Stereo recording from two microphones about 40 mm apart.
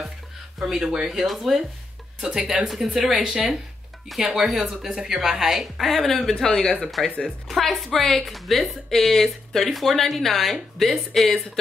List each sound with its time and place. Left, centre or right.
0.6 s speech: centre
1.0 s speech: centre
6.7 s speech: centre